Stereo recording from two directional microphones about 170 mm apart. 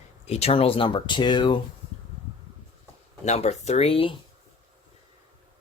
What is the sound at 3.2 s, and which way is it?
Speech, 40° left (ahead or behind).